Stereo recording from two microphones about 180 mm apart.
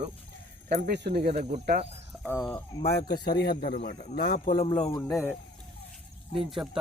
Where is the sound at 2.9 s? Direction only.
65° left (ahead or behind).